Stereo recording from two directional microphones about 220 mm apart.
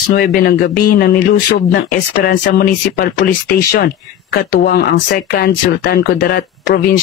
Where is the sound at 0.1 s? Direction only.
45° left (ahead or behind).